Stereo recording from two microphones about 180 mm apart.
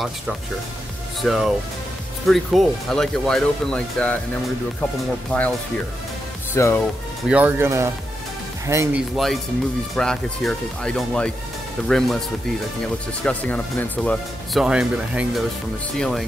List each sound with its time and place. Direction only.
1.2 s speech: centre (ahead or behind)
5.3 s speech: 5° left (ahead or behind)
6.5 s speech: 15° left (ahead or behind)
6.8 s speech: 5° right (ahead or behind)
9.1 s speech: centre (ahead or behind)
12.8 s speech: 5° left (ahead or behind)
14.6 s speech: 5° right (ahead or behind)